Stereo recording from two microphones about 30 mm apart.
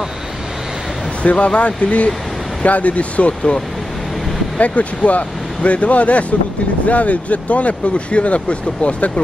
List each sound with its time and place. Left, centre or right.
1.2 s speech: left
4.6 s speech: left